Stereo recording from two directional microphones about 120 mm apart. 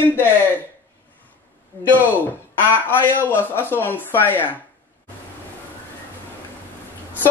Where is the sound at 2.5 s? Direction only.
15° left (ahead or behind).